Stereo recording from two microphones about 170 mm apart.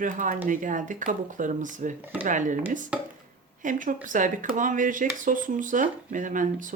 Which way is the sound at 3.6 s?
50° right (ahead or behind).